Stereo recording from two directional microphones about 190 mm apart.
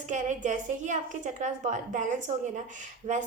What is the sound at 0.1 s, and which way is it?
A woman's voice, 40° right (ahead or behind).